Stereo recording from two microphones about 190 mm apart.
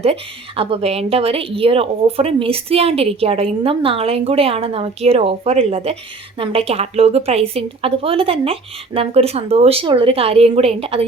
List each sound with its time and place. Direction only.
0.0 s speech: 30° right (ahead or behind)